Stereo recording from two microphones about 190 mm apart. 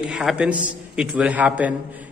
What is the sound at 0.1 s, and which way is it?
A man's voice, 5° right (ahead or behind).